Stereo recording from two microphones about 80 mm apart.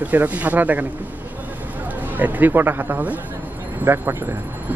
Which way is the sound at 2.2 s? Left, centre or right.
Right.